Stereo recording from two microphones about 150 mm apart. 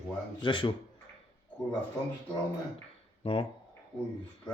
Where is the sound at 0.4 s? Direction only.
30° left (ahead or behind).